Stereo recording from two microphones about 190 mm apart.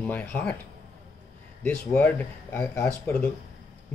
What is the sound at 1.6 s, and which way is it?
Speech, 10° left (ahead or behind).